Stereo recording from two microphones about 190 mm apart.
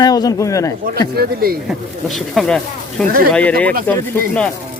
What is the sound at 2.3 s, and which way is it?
Speech, centre (ahead or behind).